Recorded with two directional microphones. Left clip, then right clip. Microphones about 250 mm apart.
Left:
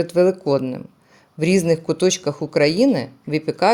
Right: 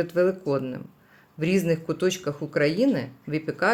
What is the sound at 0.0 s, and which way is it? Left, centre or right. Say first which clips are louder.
Speech: left 6 dB; left.